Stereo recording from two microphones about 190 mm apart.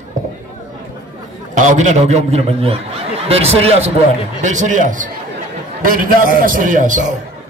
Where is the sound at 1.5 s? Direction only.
40° right (ahead or behind).